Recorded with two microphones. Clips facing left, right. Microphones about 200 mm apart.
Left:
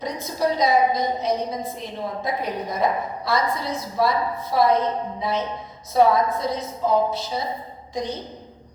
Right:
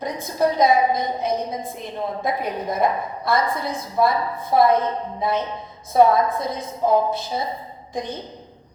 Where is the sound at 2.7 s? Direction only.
50° right (ahead or behind).